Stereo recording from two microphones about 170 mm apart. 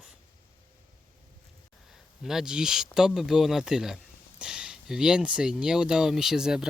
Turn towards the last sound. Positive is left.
turn(degrees=-5)  # may be behind; listen again after turning